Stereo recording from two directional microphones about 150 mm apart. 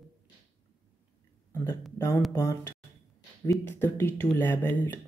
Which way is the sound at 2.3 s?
15° left (ahead or behind).